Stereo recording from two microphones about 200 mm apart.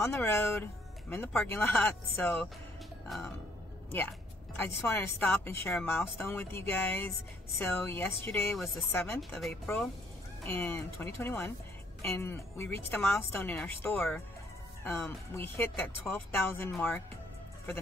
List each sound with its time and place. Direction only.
0.0 s speech: 10° left (ahead or behind)
4.6 s speech: 10° left (ahead or behind)